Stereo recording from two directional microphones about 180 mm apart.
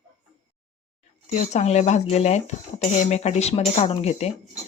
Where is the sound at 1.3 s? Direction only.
40° left (ahead or behind).